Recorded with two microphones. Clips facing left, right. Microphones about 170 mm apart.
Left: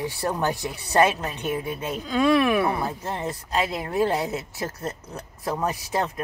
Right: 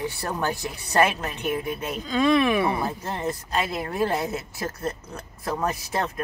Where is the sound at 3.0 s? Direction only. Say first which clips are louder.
Right 1 dB; 15° left (ahead or behind).